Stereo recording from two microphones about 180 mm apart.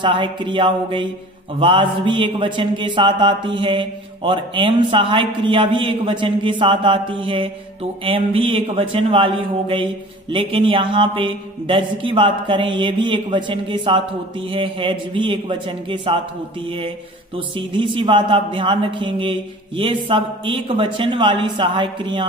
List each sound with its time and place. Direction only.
0.0 s mantra: 25° right (ahead or behind)
17.6 s mantra: 30° right (ahead or behind)